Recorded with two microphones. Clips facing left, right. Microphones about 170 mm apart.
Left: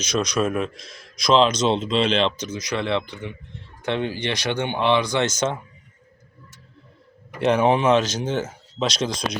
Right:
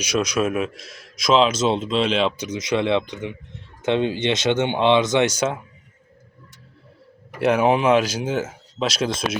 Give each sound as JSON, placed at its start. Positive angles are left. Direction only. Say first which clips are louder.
{"t": 0.0, "sound": "speech", "louder": "right 1 dB", "side_deg": -10}
{"t": 2.5, "sound": "speech", "louder": "right 4 dB", "side_deg": -20}
{"t": 7.3, "sound": "speech", "louder": "right 1 dB", "side_deg": -5}